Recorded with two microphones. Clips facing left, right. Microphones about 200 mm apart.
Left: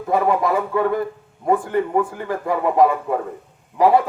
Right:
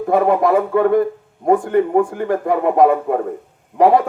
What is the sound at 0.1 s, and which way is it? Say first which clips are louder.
Speech: right 4 dB; 55° right (ahead or behind).